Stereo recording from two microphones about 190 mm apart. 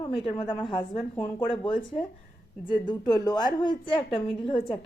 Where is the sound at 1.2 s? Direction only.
25° left (ahead or behind).